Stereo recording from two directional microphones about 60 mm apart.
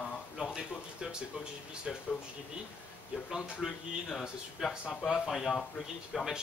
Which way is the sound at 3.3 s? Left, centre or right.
Centre.